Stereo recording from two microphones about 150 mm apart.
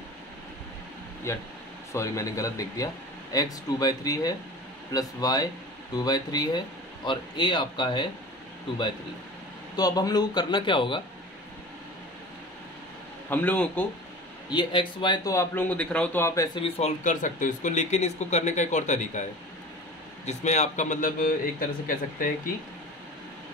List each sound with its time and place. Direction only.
1.3 s speech: 20° left (ahead or behind)
9.8 s speech: 25° left (ahead or behind)
13.3 s a man's voice: 10° left (ahead or behind)
14.5 s speech: 30° left (ahead or behind)
15.3 s a man's voice: 10° left (ahead or behind)
16.5 s speech: 40° left (ahead or behind)
17.0 s speech: 60° left (ahead or behind)
20.2 s speech: 50° left (ahead or behind); by 22.3 s 65° left (ahead or behind)